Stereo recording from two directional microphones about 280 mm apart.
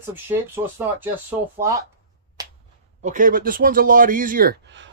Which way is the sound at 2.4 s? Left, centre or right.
Centre.